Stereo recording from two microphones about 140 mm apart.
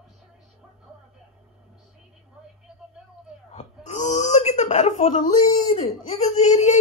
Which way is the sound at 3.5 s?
55° left (ahead or behind).